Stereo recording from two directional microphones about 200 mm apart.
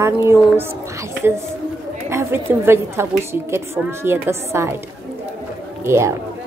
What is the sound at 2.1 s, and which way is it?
A woman's voice, 10° right (ahead or behind).